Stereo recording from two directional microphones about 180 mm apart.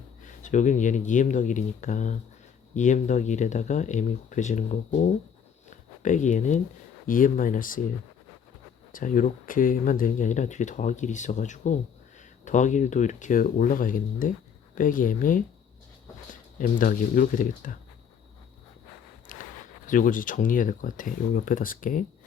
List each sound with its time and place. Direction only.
0.2 s speech: 45° left (ahead or behind)
8.9 s speech: 50° left (ahead or behind)
16.6 s speech: 50° left (ahead or behind)
19.3 s a sound: 50° left (ahead or behind)
19.9 s speech: 50° left (ahead or behind)